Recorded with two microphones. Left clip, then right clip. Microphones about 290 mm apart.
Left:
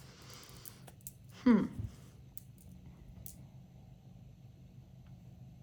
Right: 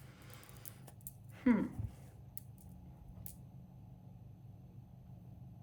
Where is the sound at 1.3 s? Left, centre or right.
Centre.